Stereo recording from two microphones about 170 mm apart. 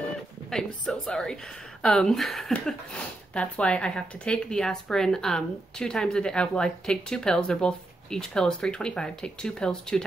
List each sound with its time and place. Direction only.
0.5 s speech: 5° left (ahead or behind)